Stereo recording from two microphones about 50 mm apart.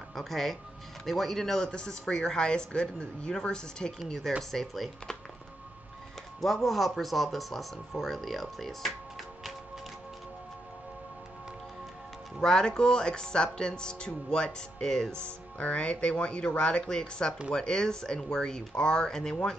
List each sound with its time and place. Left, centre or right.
0.1 s speech: centre
4.4 s speech: centre
6.4 s speech: centre
12.4 s speech: centre
15.2 s speech: left